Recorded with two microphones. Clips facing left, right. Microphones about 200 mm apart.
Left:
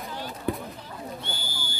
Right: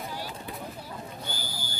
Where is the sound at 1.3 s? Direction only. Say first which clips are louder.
Left 1 dB; 25° left (ahead or behind).